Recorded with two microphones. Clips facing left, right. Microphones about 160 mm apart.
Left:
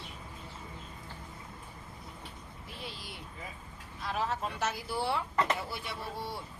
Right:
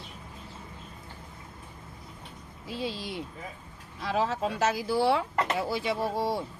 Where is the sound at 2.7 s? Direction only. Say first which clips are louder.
Right 12 dB; 90° right.